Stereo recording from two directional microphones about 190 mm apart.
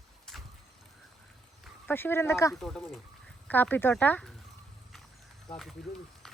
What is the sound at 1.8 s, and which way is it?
Speech, 10° left (ahead or behind).